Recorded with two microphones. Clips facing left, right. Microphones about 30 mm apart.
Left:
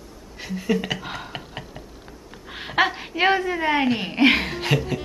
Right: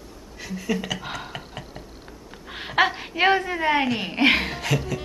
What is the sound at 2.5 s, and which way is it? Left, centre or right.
A woman's voice, centre.